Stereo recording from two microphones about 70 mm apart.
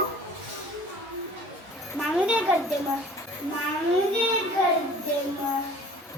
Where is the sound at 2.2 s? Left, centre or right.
Centre.